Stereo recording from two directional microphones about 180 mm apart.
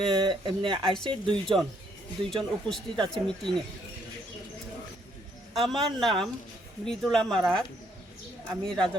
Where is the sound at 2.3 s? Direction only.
Centre (ahead or behind).